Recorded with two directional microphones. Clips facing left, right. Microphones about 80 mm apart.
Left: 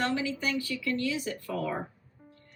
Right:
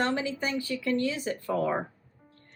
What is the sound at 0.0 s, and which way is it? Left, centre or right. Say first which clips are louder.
Speech: right 1 dB; right.